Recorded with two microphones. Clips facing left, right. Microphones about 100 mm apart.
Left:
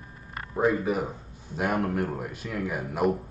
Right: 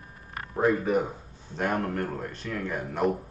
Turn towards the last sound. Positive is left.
turn(degrees=5)  # may be behind; listen again after turning